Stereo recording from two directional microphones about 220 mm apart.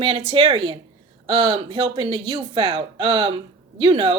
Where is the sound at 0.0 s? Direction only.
25° right (ahead or behind).